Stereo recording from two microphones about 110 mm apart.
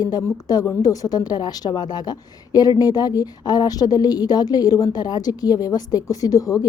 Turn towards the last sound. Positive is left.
turn(degrees=30)  # may be behind; listen again after turning